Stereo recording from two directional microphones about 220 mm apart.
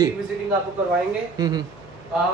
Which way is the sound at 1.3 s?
20° right (ahead or behind).